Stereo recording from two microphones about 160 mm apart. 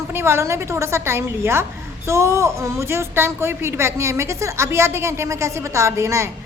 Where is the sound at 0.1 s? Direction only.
15° right (ahead or behind).